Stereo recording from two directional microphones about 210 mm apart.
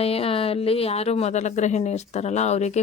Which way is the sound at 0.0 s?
30° left (ahead or behind).